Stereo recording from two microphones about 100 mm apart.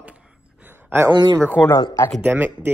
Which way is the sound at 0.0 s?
15° right (ahead or behind).